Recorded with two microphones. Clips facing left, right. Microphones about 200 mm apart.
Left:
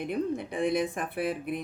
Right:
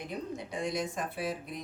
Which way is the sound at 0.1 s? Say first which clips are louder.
Left 8 dB; 55° left (ahead or behind).